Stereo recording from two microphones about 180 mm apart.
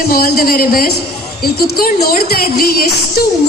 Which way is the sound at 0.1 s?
60° left (ahead or behind).